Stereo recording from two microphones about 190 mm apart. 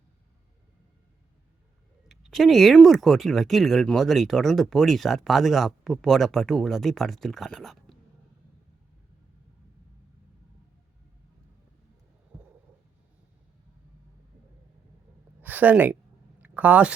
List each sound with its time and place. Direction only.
2.0 s speech: centre (ahead or behind)
15.4 s speech: 10° right (ahead or behind)
16.4 s a sound: 10° right (ahead or behind)